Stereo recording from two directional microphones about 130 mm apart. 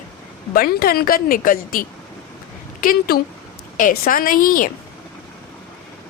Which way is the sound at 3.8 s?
90° left.